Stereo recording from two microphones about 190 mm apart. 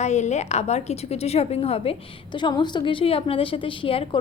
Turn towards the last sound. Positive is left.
turn(degrees=30)  # may be behind; listen again after turning